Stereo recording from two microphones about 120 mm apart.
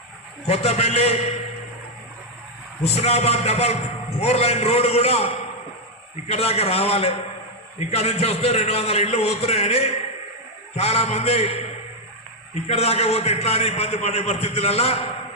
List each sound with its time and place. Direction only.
0.4 s a man's voice: 65° left (ahead or behind)
2.9 s a man's voice: 65° left (ahead or behind)
12.6 s a man's voice: 60° left (ahead or behind)